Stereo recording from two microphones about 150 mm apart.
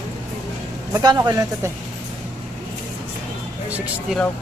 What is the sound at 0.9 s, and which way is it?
Speech, 25° right (ahead or behind).